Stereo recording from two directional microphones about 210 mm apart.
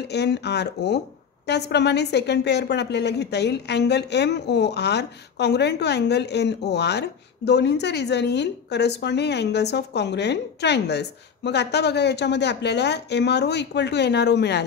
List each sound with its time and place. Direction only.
0.1 s speech: 55° left (ahead or behind)